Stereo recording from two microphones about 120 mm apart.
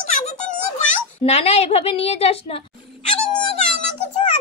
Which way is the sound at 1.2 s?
60° left (ahead or behind).